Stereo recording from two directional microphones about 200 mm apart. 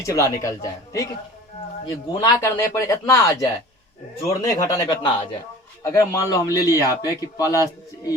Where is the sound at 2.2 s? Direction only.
15° left (ahead or behind).